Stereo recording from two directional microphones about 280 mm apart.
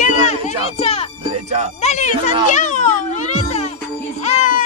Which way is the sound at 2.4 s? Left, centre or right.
Left.